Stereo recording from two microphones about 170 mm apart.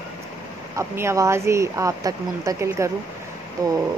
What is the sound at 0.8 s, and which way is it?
Speech, 15° right (ahead or behind).